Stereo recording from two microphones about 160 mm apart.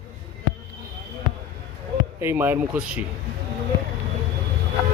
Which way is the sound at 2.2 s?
15° right (ahead or behind).